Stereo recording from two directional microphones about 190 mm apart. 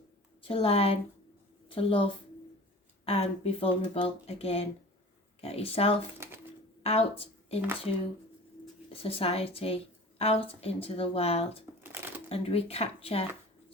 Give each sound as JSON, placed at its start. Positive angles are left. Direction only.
{"t": 0.4, "sound": "a woman's voice", "side_deg": 30}
{"t": 8.9, "sound": "a woman's voice", "side_deg": 30}
{"t": 11.8, "sound": "shuffling cards", "side_deg": -10}
{"t": 12.3, "sound": "a woman's voice", "side_deg": 30}